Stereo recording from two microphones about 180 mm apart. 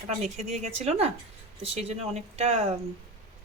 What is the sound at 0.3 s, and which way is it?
Speech, 35° right (ahead or behind).